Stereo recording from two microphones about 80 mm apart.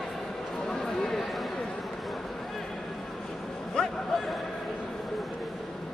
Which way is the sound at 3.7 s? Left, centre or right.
Centre.